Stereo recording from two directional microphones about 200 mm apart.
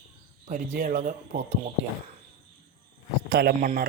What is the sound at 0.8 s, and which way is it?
Speech, 40° right (ahead or behind).